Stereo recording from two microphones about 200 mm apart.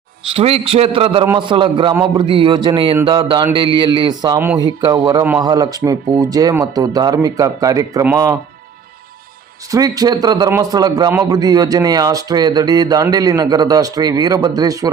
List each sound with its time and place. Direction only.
0.3 s a man's voice: 30° right (ahead or behind)
9.7 s a man's voice: 15° right (ahead or behind)